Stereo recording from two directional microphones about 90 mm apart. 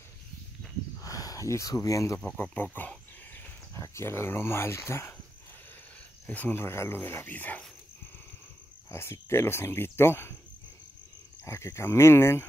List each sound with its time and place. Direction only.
0.9 s a sound: 40° left (ahead or behind)
2.3 s insect: 20° left (ahead or behind)
3.7 s speech: 30° left (ahead or behind)
6.2 s speech: 15° left (ahead or behind)
8.9 s speech: 30° left (ahead or behind)
11.4 s speech: 30° left (ahead or behind)